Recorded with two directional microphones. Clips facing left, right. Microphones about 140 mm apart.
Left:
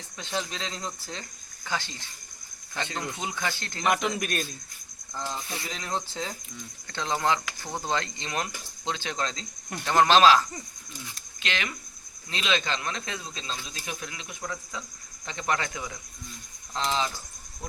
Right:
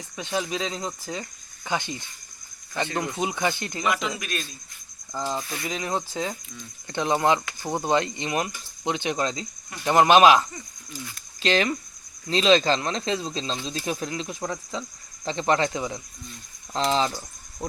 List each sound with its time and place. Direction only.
0.2 s speech: 10° right (ahead or behind)
3.8 s a man's voice: 45° left (ahead or behind)
5.7 s speech: 10° right (ahead or behind)
11.3 s speech: 35° right (ahead or behind)